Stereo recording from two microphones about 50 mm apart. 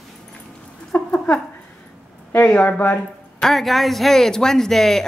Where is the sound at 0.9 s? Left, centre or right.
Left.